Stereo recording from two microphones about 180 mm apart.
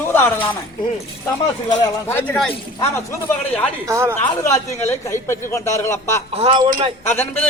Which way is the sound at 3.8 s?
15° right (ahead or behind).